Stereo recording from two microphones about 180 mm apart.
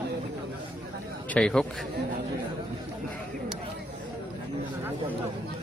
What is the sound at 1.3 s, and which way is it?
Speech, 5° left (ahead or behind).